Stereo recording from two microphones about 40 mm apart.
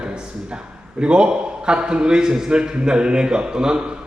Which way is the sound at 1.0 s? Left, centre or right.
Right.